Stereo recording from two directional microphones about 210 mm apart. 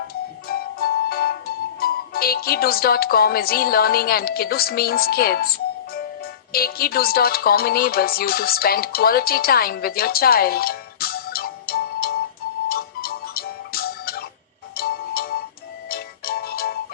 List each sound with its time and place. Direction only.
0.1 s music: 45° left (ahead or behind)